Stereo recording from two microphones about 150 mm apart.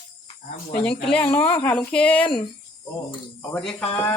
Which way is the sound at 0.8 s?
10° left (ahead or behind).